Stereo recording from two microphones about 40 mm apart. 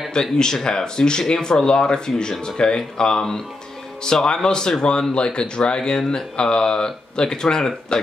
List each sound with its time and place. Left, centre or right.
0.1 s speech: centre